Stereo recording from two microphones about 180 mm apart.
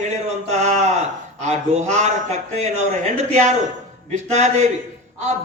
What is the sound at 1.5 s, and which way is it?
Speech, 40° right (ahead or behind).